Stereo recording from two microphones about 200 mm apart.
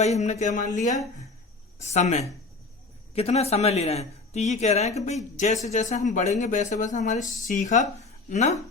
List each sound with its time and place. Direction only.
0.0 s speech: 35° left (ahead or behind)